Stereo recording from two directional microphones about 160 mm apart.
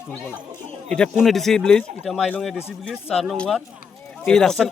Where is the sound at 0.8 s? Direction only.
5° left (ahead or behind).